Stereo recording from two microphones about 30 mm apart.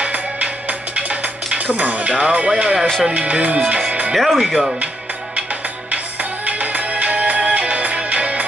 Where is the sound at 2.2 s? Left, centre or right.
Right.